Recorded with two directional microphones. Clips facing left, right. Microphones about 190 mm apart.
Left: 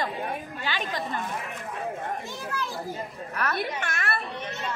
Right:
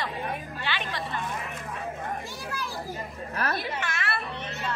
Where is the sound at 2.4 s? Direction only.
10° right (ahead or behind).